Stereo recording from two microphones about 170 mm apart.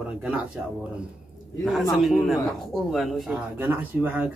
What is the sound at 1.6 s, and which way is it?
A man's voice, centre (ahead or behind).